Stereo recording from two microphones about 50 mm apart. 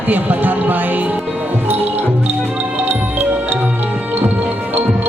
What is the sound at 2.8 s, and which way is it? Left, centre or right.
Music, right.